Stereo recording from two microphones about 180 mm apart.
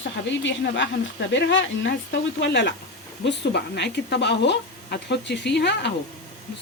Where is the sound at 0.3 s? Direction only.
85° left.